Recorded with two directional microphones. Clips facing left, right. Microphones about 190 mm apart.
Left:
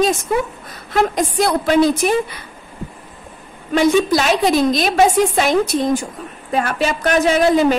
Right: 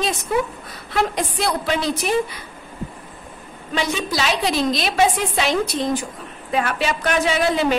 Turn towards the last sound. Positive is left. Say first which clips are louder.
# left 5 dB
turn(degrees=45)  # may be behind; listen again after turning